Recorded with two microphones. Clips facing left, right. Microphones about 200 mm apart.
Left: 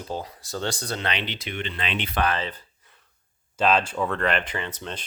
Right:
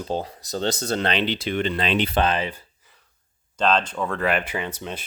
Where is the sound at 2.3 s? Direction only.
15° right (ahead or behind).